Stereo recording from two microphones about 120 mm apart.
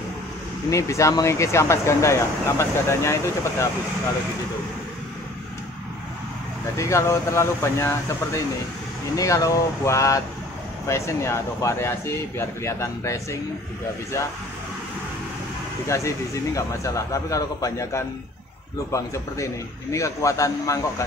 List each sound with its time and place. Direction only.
0.7 s speech: 25° left (ahead or behind)
6.8 s speech: 25° left (ahead or behind)
15.9 s speech: 25° left (ahead or behind)